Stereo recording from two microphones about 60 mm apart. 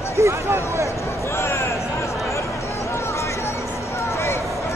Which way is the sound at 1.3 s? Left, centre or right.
Left.